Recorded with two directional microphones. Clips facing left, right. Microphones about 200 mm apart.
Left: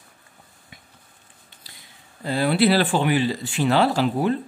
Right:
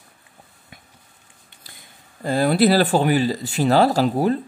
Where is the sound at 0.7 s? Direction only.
50° right (ahead or behind).